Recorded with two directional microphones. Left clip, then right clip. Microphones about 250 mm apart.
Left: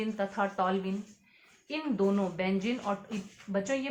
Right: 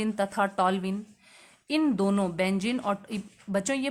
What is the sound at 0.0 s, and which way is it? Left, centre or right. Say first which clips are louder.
A woman's voice: right 4 dB; right.